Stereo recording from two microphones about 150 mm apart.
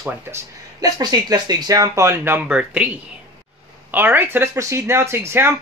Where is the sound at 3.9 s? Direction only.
15° right (ahead or behind).